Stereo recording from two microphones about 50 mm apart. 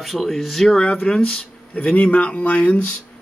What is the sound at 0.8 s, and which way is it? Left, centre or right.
Speech, left.